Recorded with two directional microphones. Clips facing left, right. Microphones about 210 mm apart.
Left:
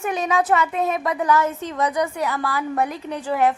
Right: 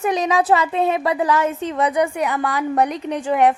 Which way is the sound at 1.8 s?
10° right (ahead or behind).